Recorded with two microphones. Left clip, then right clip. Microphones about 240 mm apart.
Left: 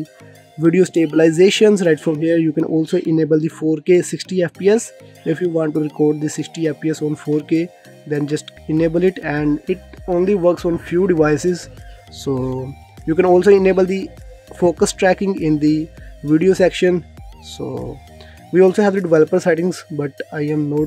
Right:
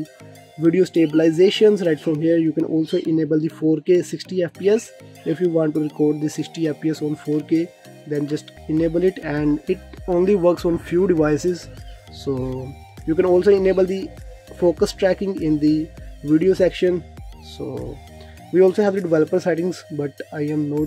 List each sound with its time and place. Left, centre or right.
0.7 s speech: left